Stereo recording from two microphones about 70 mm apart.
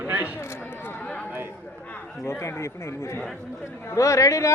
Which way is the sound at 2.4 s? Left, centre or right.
Left.